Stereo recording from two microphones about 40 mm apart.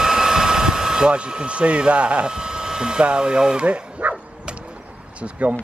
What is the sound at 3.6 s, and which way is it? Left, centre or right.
Speech, right.